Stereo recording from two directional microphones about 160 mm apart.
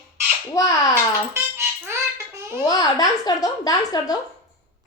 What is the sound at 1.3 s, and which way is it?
Music, 15° right (ahead or behind).